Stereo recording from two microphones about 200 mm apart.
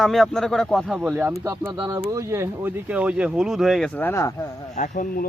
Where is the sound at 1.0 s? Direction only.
10° right (ahead or behind); by 4.5 s 15° left (ahead or behind).